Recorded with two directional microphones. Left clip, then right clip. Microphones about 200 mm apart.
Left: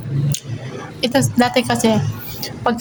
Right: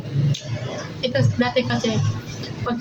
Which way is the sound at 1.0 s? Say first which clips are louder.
Left 6 dB; 70° left (ahead or behind).